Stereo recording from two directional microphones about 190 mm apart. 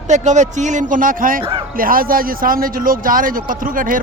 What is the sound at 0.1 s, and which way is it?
Speech, 40° right (ahead or behind).